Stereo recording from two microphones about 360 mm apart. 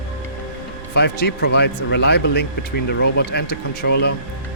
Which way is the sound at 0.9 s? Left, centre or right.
Left.